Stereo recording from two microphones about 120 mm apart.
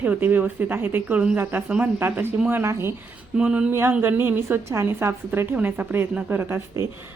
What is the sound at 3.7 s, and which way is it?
A woman's voice, 20° right (ahead or behind).